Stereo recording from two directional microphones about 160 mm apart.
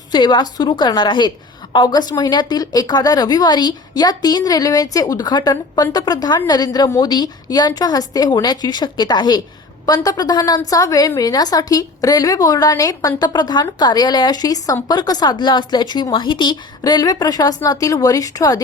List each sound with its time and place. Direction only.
0.1 s a woman's voice: 30° left (ahead or behind)